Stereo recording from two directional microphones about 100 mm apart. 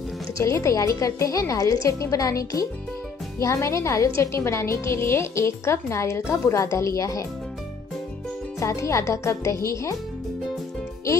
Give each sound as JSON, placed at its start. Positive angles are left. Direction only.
{"t": 0.4, "sound": "a woman's voice", "side_deg": 30}
{"t": 8.5, "sound": "a woman's voice", "side_deg": 30}